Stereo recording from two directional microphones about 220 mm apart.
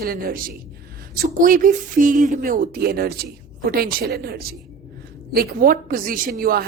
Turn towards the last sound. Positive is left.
turn(degrees=-40)  # may be behind; listen again after turning